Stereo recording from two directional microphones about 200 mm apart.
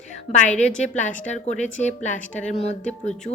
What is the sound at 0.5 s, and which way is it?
A woman's voice, 35° left (ahead or behind).